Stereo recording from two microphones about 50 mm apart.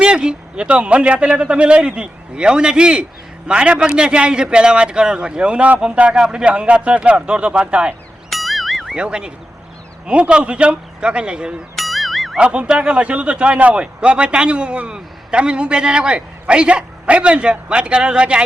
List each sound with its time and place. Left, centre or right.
0.0 s a man's voice: centre
8.3 s music: centre
9.0 s a man's voice: centre
11.8 s music: centre
12.4 s a man's voice: centre